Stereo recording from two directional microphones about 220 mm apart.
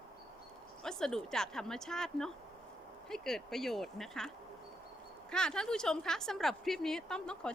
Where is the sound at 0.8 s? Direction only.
5° left (ahead or behind).